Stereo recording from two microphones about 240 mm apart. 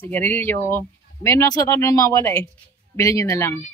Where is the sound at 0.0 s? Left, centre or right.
Centre.